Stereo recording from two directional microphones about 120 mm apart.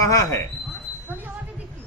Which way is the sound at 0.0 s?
25° left (ahead or behind).